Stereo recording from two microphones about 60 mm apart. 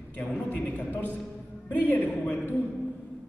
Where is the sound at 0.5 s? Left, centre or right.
Left.